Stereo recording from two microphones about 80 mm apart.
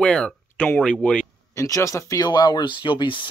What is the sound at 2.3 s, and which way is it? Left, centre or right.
Speech, left.